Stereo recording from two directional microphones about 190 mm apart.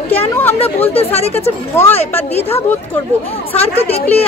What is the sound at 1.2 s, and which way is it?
Speech, 35° left (ahead or behind).